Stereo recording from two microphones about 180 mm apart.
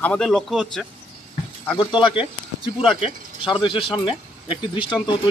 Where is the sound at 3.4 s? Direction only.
30° left (ahead or behind).